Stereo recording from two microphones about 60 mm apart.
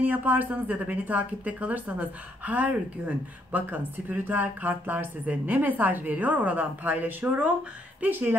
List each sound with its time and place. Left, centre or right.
0.0 s speech: right